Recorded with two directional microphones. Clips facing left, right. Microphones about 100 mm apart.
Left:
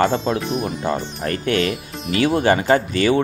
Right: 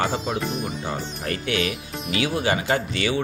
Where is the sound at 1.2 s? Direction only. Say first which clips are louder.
Left 5 dB; 45° left (ahead or behind).